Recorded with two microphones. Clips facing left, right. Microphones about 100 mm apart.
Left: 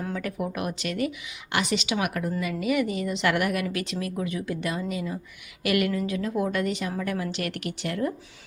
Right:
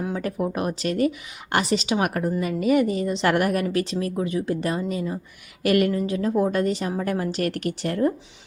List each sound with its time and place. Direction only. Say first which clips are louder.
0.1 s a woman's voice: right 4 dB; 35° right (ahead or behind)